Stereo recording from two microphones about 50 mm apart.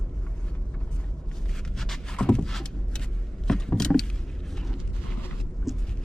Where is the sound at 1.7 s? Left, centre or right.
Centre.